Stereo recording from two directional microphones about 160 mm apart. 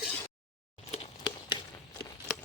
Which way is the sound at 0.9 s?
35° left (ahead or behind).